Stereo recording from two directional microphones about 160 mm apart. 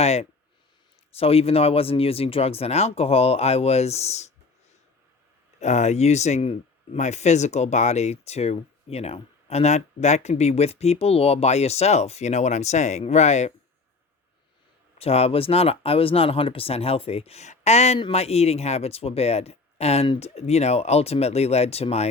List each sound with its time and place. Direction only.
0.0 s speech: 40° left (ahead or behind)
5.5 s speech: 45° left (ahead or behind)
14.9 s speech: 40° left (ahead or behind)